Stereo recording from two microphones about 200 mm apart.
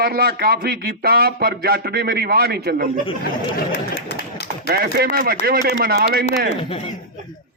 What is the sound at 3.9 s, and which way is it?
Run, 55° left (ahead or behind).